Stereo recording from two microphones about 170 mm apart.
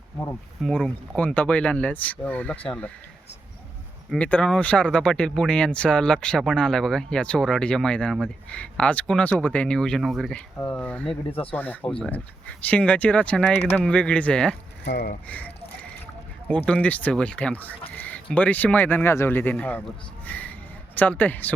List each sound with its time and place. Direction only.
0.3 s speech: 5° left (ahead or behind)
4.1 s speech: 10° left (ahead or behind)
14.8 s speech: 80° left
15.3 s speech: 10° left (ahead or behind)
20.2 s a sound: 10° left (ahead or behind)
20.9 s speech: 10° left (ahead or behind)